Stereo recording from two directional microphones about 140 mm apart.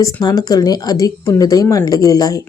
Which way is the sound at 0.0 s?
25° left (ahead or behind).